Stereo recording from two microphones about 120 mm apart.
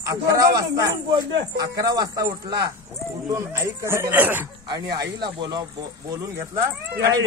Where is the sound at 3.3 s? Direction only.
20° right (ahead or behind).